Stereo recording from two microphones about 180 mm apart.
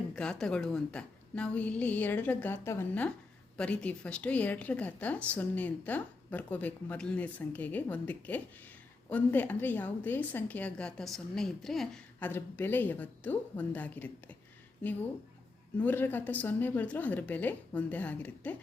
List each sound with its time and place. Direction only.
0.1 s a woman's voice: 5° left (ahead or behind)
15.8 s a woman's voice: 10° left (ahead or behind)